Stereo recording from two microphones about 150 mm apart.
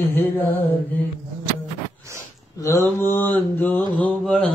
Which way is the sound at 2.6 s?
20° left (ahead or behind).